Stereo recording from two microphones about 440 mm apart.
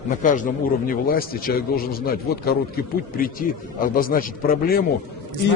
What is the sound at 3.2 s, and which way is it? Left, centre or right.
A man's voice, centre.